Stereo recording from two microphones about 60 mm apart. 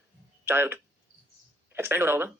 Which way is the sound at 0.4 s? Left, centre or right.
Right.